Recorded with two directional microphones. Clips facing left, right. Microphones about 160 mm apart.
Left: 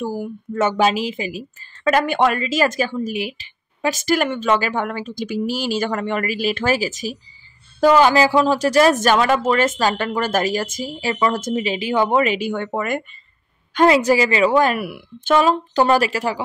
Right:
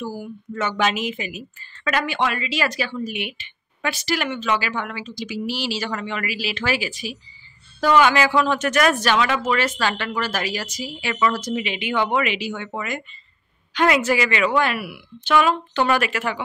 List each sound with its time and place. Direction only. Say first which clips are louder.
0.0 s speech: left 5 dB; 50° left (ahead or behind)
0.7 s a woman's voice: left 4 dB; 35° left (ahead or behind)
4.0 s a woman's voice: left 6 dB; 50° left (ahead or behind); by 9.0 s 30° left (ahead or behind)
9.0 s speech: left 4 dB; 45° left (ahead or behind)
13.8 s a woman's voice: left 5 dB; 35° left (ahead or behind); by 15.3 s 50° left (ahead or behind)
15.3 s a woman's voice: left 3 dB; 40° left (ahead or behind)